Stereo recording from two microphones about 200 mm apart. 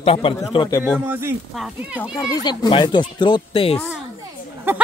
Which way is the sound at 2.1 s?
15° left (ahead or behind).